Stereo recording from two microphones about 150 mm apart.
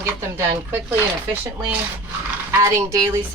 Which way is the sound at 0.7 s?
15° right (ahead or behind).